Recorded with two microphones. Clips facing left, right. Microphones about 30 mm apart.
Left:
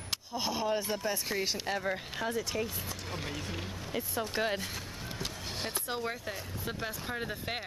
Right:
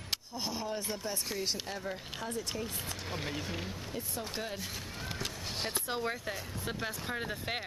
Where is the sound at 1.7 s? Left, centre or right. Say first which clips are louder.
Left 6 dB; left.